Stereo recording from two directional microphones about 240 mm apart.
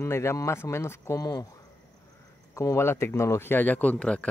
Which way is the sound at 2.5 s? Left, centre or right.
Centre.